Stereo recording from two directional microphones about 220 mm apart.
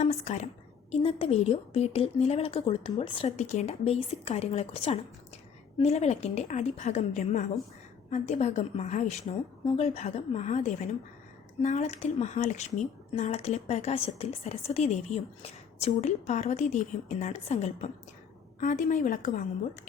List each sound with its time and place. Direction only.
0.0 s a woman's voice: 30° left (ahead or behind)